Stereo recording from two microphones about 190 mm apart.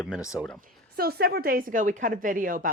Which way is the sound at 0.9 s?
55° right (ahead or behind).